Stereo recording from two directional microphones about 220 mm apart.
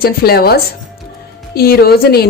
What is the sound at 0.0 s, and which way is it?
A woman's voice, 45° left (ahead or behind).